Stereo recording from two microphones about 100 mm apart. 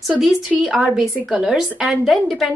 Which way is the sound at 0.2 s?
Centre (ahead or behind).